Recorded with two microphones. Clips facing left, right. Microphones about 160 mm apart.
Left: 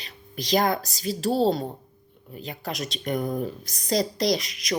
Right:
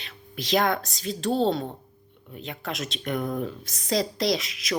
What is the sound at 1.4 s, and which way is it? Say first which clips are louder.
Speech: left 2 dB; 40° left (ahead or behind).